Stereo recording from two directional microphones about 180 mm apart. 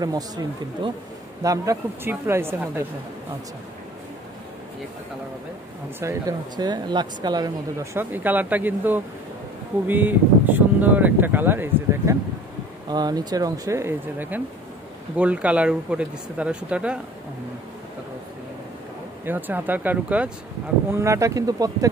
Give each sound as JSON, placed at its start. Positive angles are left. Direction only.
{"t": 0.0, "sound": "speech", "side_deg": -20}
{"t": 5.9, "sound": "speech", "side_deg": -20}
{"t": 12.9, "sound": "speech", "side_deg": -20}
{"t": 19.2, "sound": "speech", "side_deg": -10}